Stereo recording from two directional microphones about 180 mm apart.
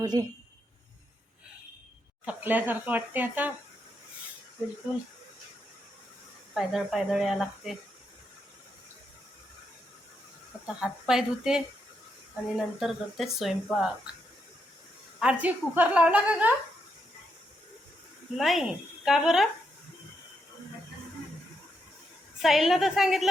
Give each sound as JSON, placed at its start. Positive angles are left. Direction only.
{"t": 0.0, "sound": "speech", "side_deg": -20}
{"t": 2.2, "sound": "a woman's voice", "side_deg": -10}
{"t": 6.5, "sound": "speech", "side_deg": 0}
{"t": 10.8, "sound": "speech", "side_deg": 0}
{"t": 15.2, "sound": "a woman's voice", "side_deg": -5}
{"t": 18.3, "sound": "speech", "side_deg": 0}
{"t": 22.4, "sound": "speech", "side_deg": 0}